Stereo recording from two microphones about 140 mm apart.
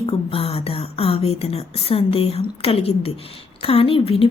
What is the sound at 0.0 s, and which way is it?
A woman's voice, 45° left (ahead or behind).